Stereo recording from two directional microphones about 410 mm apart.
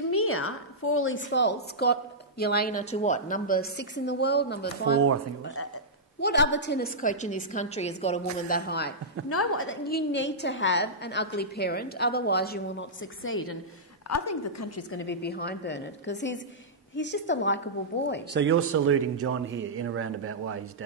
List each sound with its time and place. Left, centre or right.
0.1 s a woman's voice: left
6.2 s a woman's voice: left
18.3 s speech: right